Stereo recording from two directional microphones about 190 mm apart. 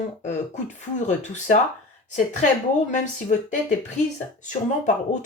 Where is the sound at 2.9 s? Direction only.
40° left (ahead or behind).